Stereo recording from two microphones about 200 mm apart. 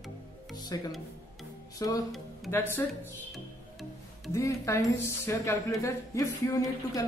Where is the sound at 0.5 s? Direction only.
20° left (ahead or behind).